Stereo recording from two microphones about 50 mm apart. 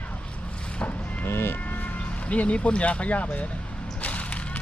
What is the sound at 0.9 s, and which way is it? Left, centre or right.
Livestock, left.